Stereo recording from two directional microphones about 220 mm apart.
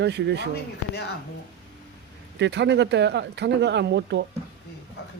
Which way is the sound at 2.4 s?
50° right (ahead or behind).